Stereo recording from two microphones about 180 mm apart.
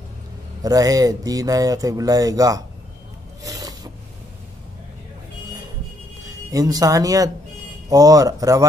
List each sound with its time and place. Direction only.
0.6 s speech: 20° right (ahead or behind)
3.4 s filing: 20° right (ahead or behind)
6.2 s speech: 20° right (ahead or behind)